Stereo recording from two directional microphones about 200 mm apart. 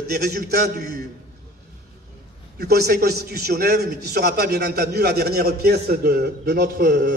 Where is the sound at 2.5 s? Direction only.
50° right (ahead or behind).